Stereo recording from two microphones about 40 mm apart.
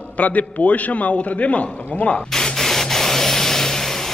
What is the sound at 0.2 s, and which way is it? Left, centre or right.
A man's voice, left.